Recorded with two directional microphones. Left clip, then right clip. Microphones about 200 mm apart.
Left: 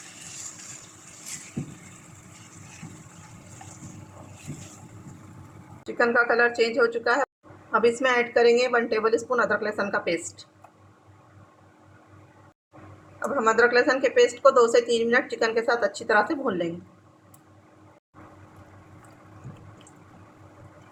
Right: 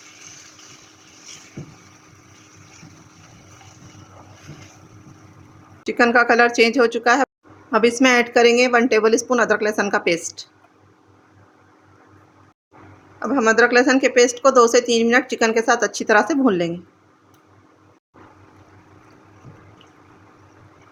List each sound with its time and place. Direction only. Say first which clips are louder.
5.8 s speech: right 6 dB; 55° right (ahead or behind)
13.1 s a woman's voice: right 5 dB; 55° right (ahead or behind)